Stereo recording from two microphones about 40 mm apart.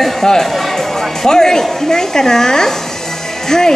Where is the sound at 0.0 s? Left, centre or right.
Centre.